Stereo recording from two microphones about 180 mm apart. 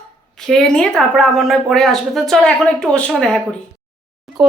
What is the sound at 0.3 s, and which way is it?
Speech, centre (ahead or behind).